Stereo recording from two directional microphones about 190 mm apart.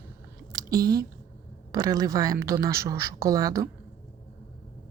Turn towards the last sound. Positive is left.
turn(degrees=-15)  # may be behind; listen again after turning